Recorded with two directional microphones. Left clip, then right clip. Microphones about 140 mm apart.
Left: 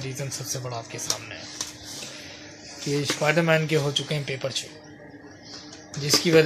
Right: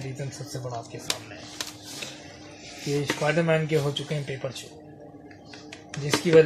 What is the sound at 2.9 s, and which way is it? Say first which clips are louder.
Speech: left 2 dB; 35° left (ahead or behind).